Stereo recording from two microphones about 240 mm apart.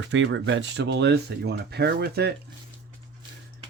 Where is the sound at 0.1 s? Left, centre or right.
Right.